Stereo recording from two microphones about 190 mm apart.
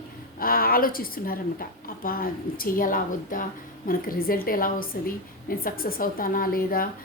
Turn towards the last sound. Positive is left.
turn(degrees=50)  # may be behind; listen again after turning